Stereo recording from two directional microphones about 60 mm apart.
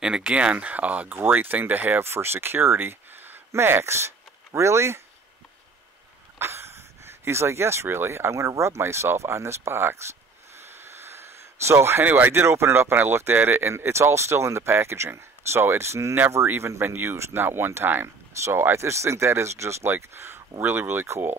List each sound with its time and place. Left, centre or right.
0.0 s speech: centre; by 2.0 s right
2.0 s speech: right
6.3 s speech: right
10.7 s a sound: right
12.0 s speech: right